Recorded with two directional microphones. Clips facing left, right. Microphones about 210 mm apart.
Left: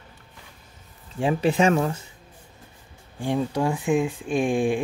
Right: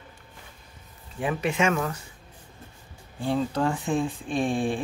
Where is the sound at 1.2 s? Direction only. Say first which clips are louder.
Left 5 dB; 30° left (ahead or behind).